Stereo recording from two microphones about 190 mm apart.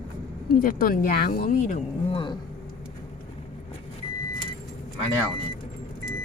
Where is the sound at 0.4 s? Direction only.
50° left (ahead or behind).